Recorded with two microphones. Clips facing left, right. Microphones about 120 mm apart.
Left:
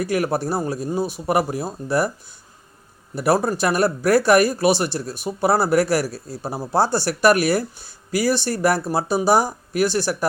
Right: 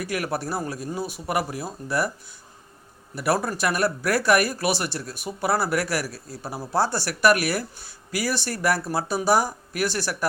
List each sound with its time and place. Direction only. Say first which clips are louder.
0.0 s speech: left 6 dB; 30° left (ahead or behind)
3.2 s speech: left 5 dB; 25° left (ahead or behind)